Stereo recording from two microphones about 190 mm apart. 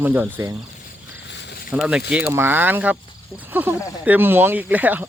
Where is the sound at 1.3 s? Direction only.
65° left (ahead or behind).